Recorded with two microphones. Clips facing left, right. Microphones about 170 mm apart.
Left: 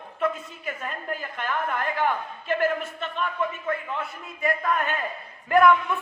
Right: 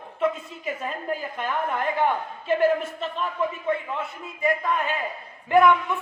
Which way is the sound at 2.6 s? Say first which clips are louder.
Right 5 dB; 30° right (ahead or behind).